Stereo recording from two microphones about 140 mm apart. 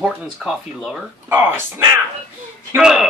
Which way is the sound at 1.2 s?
15° right (ahead or behind).